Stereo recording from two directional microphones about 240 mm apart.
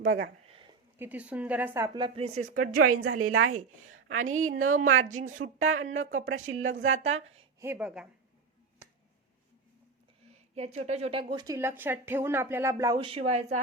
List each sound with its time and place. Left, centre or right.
0.0 s speech: right
0.4 s a sound: right
0.9 s speech: centre
2.0 s speech: right
2.8 s a woman's voice: right
5.0 s speech: right
5.4 s a woman's voice: right
7.6 s a woman's voice: centre
10.2 s a sound: right
10.8 s speech: right